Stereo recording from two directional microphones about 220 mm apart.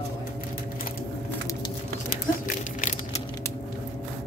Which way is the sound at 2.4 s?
35° left (ahead or behind).